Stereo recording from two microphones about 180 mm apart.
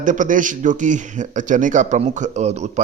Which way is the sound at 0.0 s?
45° right (ahead or behind).